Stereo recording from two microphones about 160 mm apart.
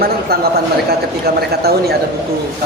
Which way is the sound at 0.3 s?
75° right (ahead or behind).